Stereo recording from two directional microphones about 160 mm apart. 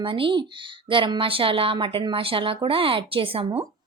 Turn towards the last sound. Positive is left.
turn(degrees=-35)  # may be behind; listen again after turning